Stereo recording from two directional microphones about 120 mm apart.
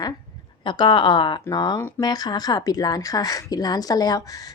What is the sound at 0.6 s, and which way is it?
A woman's voice, 40° left (ahead or behind).